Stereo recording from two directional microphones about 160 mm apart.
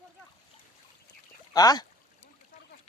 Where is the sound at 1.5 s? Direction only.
25° left (ahead or behind).